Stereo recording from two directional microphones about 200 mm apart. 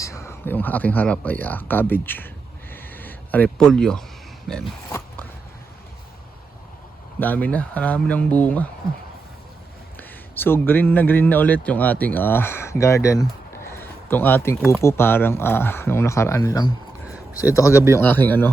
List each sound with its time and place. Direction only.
0.0 s a man's voice: 15° left (ahead or behind)
2.7 s a sound: 10° left (ahead or behind)
4.9 s zipper: 15° left (ahead or behind)
7.2 s a man's voice: 10° left (ahead or behind)
10.0 s a man's voice: 10° left (ahead or behind)